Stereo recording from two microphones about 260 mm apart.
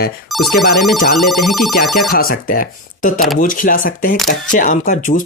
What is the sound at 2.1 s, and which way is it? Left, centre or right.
Speech, left.